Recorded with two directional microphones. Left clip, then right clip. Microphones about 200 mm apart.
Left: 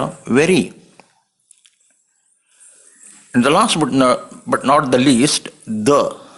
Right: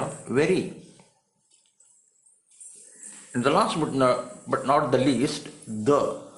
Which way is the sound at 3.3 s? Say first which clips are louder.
Left 9 dB; 40° left (ahead or behind).